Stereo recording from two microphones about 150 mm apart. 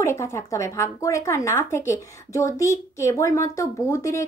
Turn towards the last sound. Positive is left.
turn(degrees=20)  # may be behind; listen again after turning